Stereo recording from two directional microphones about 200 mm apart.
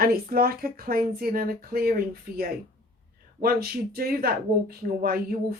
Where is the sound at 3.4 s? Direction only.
50° right (ahead or behind).